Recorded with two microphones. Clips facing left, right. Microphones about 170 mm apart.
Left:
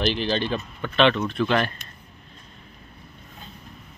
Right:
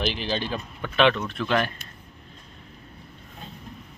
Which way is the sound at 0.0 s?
5° right (ahead or behind).